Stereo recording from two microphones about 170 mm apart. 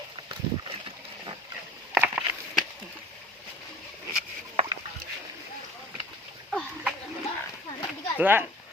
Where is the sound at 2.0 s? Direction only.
5° right (ahead or behind).